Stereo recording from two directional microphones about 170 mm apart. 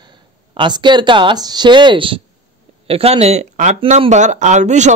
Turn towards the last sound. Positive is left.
turn(degrees=-45)  # may be behind; listen again after turning